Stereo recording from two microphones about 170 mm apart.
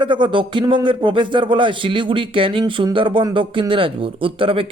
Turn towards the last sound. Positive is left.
turn(degrees=-30)  # may be behind; listen again after turning